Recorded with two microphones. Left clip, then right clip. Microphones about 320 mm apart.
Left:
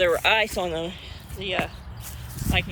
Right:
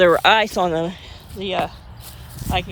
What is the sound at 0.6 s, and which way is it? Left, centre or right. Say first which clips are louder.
Speech: right 8 dB; right.